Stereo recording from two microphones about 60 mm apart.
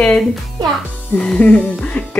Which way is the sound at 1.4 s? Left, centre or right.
Left.